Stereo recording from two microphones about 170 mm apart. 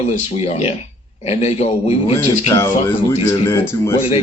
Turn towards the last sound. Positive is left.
turn(degrees=15)  # may be behind; listen again after turning